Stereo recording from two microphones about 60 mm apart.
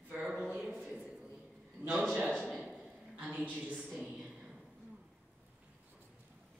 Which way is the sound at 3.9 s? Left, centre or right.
Centre.